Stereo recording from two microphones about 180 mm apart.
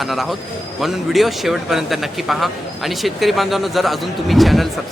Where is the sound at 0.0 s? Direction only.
Centre (ahead or behind).